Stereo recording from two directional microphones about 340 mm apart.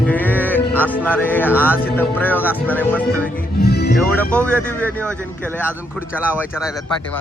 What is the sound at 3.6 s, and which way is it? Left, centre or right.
Music, left.